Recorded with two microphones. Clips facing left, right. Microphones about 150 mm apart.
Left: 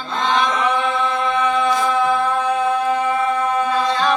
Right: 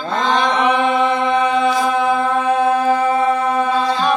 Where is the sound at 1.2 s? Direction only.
20° right (ahead or behind).